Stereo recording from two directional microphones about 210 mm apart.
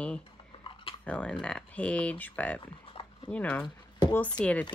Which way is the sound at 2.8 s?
25° left (ahead or behind).